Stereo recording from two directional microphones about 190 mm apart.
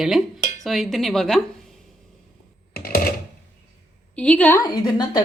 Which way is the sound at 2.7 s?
50° left (ahead or behind).